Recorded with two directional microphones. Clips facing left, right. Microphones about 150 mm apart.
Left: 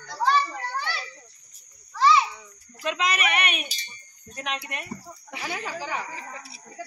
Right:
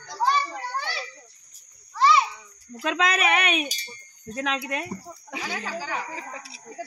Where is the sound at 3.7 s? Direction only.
40° right (ahead or behind).